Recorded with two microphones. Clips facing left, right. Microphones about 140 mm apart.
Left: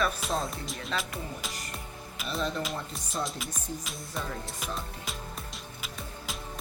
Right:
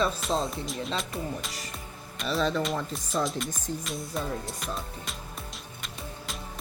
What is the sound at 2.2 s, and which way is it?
Speech, 90° right.